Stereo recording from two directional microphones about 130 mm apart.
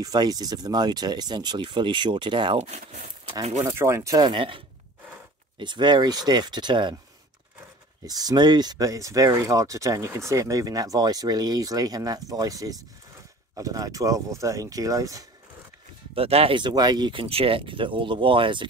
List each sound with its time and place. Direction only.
0.0 s speech: 30° right (ahead or behind)
3.5 s speech: 20° right (ahead or behind); by 7.0 s 35° right (ahead or behind)
8.1 s speech: 30° right (ahead or behind)
16.2 s speech: 50° right (ahead or behind)